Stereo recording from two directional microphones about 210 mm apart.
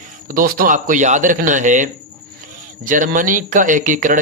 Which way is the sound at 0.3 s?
40° right (ahead or behind).